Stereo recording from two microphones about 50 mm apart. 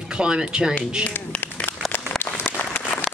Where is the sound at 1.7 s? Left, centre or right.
Left.